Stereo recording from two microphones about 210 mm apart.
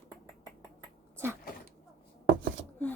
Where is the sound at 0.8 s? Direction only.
15° right (ahead or behind).